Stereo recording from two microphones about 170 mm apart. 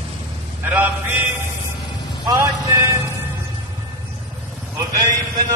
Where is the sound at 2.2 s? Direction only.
20° right (ahead or behind).